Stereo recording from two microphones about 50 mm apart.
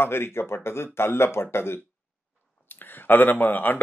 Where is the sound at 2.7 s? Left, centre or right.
Left.